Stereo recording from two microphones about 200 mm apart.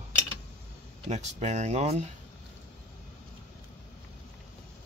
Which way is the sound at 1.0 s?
35° right (ahead or behind).